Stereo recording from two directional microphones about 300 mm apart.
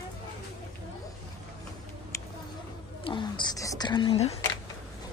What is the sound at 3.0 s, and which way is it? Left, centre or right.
Whispering, centre.